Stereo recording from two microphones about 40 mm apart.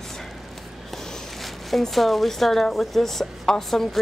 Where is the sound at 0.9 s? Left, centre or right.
Centre.